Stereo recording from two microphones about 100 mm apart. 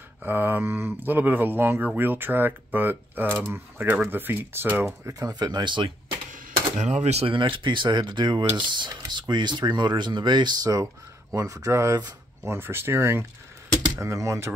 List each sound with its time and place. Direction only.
0.2 s speech: 20° right (ahead or behind)
5.0 s speech: 40° right (ahead or behind)
7.1 s speech: 90° right
7.3 s speech: 55° right (ahead or behind); by 12.1 s 35° right (ahead or behind)
12.4 s speech: 25° right (ahead or behind)